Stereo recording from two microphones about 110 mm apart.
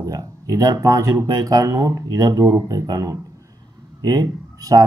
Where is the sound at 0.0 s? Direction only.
30° right (ahead or behind).